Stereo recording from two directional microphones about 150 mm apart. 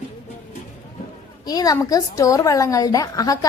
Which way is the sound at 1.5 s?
25° left (ahead or behind).